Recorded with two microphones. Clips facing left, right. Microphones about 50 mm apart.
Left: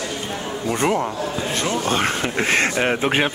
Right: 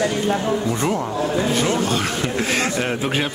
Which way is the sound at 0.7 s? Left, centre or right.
Left.